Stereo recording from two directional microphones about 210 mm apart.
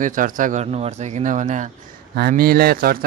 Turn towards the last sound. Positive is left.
turn(degrees=-45)  # may be behind; listen again after turning